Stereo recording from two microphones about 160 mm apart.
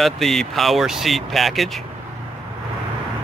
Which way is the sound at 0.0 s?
Centre (ahead or behind).